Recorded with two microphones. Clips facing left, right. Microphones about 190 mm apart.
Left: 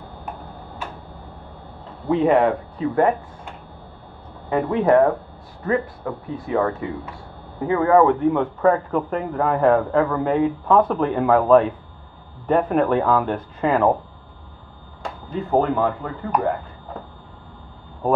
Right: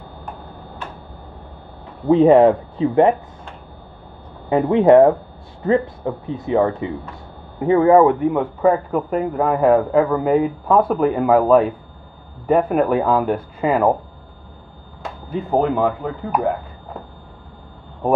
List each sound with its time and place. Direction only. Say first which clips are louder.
2.2 s speech: right 6 dB; 30° right (ahead or behind)
4.5 s a man's voice: right 5 dB; 25° right (ahead or behind); by 13.9 s 10° right (ahead or behind)
15.2 s a man's voice: right 1 dB; 15° right (ahead or behind)